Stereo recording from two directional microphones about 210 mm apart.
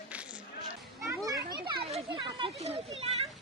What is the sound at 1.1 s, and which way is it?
Children playing, 15° right (ahead or behind).